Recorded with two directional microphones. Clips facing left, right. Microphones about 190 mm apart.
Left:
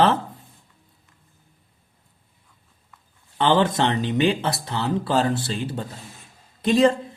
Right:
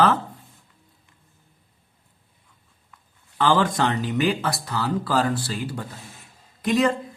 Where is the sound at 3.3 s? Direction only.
25° left (ahead or behind).